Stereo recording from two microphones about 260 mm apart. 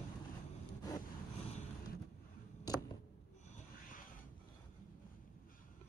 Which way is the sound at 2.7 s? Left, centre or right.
Centre.